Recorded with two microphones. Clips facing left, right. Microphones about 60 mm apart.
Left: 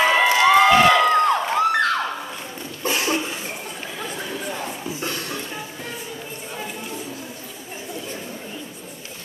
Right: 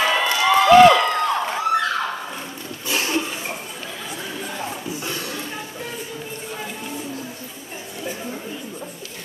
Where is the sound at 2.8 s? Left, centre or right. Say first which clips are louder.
Left 2 dB; left.